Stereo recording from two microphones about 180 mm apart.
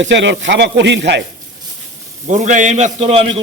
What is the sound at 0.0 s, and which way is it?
Speech, 80° right.